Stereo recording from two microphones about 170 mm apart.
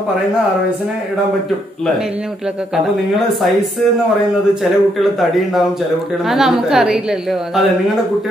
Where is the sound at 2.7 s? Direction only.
Centre (ahead or behind).